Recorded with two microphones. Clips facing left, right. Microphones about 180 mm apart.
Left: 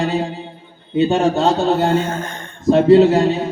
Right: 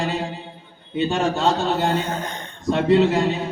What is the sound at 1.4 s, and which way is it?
Speech, 40° left (ahead or behind).